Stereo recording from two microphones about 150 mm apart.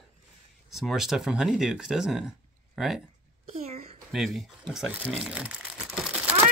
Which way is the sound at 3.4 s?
45° right (ahead or behind).